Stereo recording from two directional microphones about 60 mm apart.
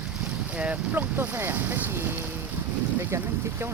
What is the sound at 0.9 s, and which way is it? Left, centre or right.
Speech, right.